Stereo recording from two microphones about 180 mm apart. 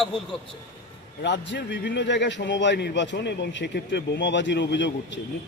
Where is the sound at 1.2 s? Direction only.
70° left (ahead or behind).